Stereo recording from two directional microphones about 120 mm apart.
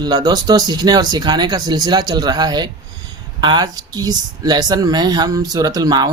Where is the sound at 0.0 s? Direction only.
35° right (ahead or behind).